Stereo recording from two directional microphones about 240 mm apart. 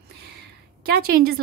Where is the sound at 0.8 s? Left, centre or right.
Right.